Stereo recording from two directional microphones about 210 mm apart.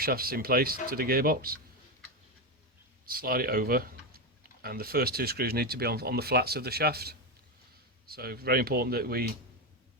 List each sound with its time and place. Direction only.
0.0 s speech: 45° right (ahead or behind)
3.1 s speech: 45° right (ahead or behind)